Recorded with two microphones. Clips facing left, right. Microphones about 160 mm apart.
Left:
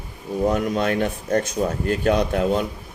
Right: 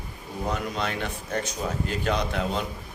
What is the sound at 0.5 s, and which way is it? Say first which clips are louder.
A man's voice: left 8 dB; 50° left (ahead or behind).